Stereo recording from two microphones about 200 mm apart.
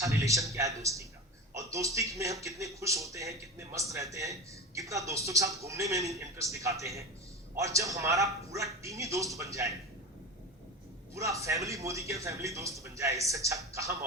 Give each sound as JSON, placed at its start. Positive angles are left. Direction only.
{"t": 0.0, "sound": "speech", "side_deg": -15}
{"t": 11.1, "sound": "speech", "side_deg": -15}